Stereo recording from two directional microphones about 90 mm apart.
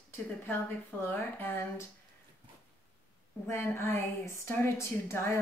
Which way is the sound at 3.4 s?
30° left (ahead or behind).